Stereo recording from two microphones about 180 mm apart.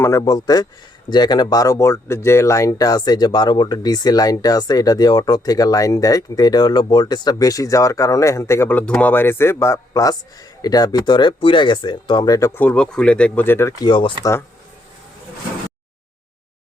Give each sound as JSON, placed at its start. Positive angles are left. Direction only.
{"t": 0.0, "sound": "speech", "side_deg": 20}